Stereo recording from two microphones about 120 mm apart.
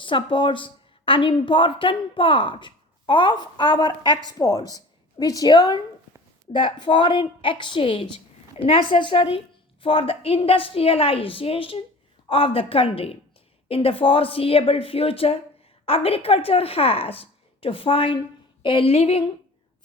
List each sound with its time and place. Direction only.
0.0 s a woman's voice: 45° left (ahead or behind)